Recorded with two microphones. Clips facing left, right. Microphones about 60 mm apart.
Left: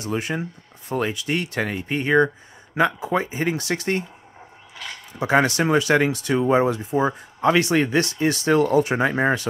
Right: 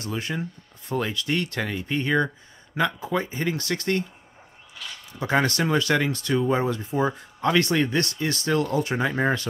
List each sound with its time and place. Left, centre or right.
0.2 s speech: centre
1.7 s speech: left
5.2 s speech: centre
6.8 s speech: centre